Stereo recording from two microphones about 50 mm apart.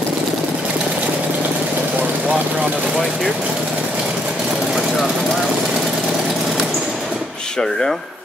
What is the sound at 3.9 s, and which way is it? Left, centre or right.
Vehicle, centre.